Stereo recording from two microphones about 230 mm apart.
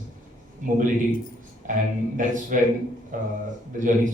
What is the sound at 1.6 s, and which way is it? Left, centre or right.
A man's voice, right.